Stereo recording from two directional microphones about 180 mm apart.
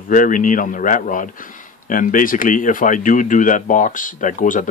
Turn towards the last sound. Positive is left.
turn(degrees=45)  # may be behind; listen again after turning